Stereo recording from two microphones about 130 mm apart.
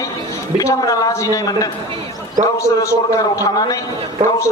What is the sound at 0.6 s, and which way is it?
A man's voice, 25° left (ahead or behind).